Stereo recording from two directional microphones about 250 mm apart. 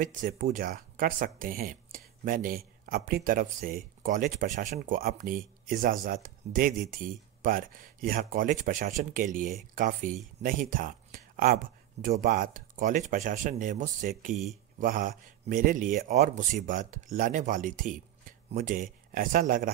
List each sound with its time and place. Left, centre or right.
0.0 s speech: right
14.3 s speech: centre
14.8 s speech: right